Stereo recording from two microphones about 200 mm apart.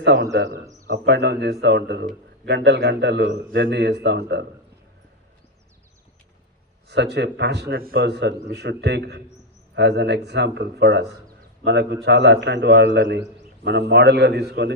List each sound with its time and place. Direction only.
0.0 s a man's voice: 60° right (ahead or behind)
6.8 s a man's voice: 60° right (ahead or behind)